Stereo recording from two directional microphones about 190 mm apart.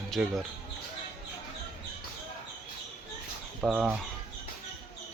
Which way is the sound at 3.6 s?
5° right (ahead or behind).